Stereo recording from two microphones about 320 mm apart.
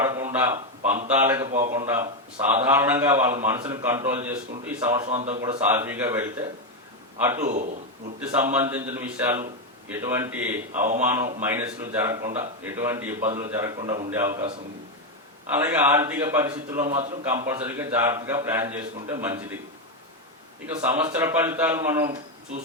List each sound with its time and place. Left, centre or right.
0.0 s a man's voice: centre
1.5 s a man's voice: right
2.5 s a man's voice: centre
5.2 s a man's voice: centre
5.6 s a man's voice: centre
7.4 s a man's voice: right
8.2 s a man's voice: centre
11.2 s a man's voice: right
11.5 s a man's voice: centre
15.5 s a man's voice: centre
20.7 s a man's voice: centre